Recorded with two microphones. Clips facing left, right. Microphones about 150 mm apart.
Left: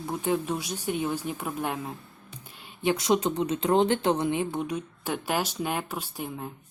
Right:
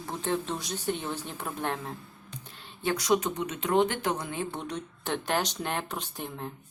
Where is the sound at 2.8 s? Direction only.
25° left (ahead or behind).